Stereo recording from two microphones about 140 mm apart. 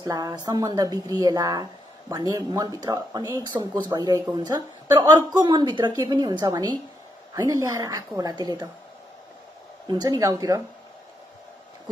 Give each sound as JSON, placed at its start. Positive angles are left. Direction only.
{"t": 0.0, "sound": "speech", "side_deg": -30}
{"t": 9.8, "sound": "speech", "side_deg": -30}